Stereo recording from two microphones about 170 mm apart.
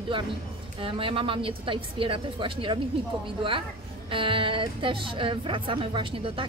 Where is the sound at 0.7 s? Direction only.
30° right (ahead or behind).